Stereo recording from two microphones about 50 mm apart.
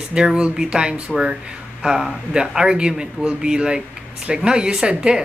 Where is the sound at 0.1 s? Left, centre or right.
Centre.